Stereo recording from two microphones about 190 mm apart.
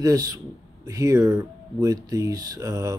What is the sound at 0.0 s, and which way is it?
Speech, 20° right (ahead or behind).